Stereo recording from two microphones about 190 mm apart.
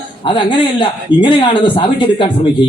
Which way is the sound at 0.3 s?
25° left (ahead or behind).